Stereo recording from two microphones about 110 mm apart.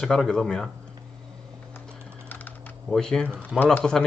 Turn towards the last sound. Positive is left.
turn(degrees=5)  # may be behind; listen again after turning